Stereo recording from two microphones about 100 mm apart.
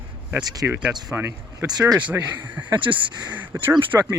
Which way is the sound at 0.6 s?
15° right (ahead or behind).